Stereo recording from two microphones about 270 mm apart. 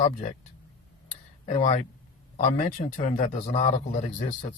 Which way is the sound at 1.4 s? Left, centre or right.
Left.